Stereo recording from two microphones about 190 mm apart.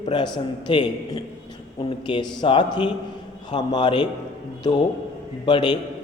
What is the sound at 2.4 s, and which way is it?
A man's voice, 25° left (ahead or behind).